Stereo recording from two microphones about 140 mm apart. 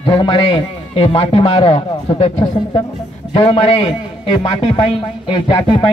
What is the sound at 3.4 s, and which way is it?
A man's voice, 45° left (ahead or behind).